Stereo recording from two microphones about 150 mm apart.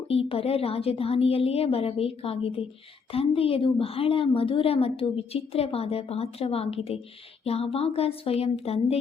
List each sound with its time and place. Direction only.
0.1 s a woman's voice: 40° left (ahead or behind)